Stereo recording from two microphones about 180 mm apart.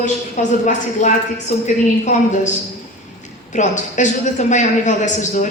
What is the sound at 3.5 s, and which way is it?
A man's voice, 45° left (ahead or behind).